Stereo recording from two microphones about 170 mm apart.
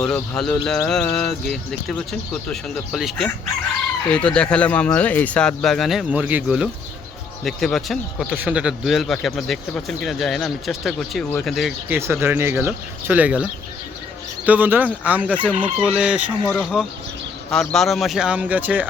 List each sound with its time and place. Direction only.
0.0 s speech: 5° left (ahead or behind)
11.9 s speech: 15° right (ahead or behind)
15.5 s fowl: 30° right (ahead or behind)
15.9 s speech: 5° right (ahead or behind)